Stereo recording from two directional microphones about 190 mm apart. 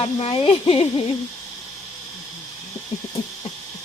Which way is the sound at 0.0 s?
30° left (ahead or behind).